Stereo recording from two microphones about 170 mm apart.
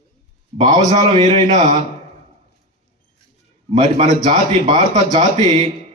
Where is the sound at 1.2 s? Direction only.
45° right (ahead or behind).